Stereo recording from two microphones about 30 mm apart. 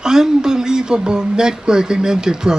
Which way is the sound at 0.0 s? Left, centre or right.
Right.